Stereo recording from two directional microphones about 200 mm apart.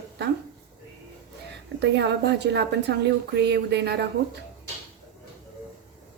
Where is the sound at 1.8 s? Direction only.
60° right (ahead or behind).